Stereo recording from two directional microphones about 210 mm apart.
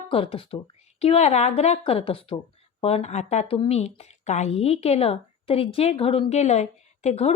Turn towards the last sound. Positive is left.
turn(degrees=30)  # may be behind; listen again after turning